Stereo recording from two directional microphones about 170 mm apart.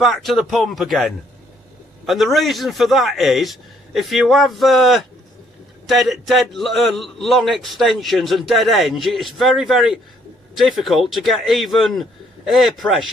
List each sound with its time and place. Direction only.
0.0 s a man's voice: centre (ahead or behind)